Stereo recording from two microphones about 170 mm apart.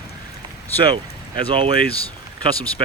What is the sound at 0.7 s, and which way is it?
Speech, 10° left (ahead or behind).